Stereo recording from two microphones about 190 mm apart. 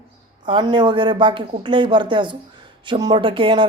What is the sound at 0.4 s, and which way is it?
A woman's voice, 25° right (ahead or behind).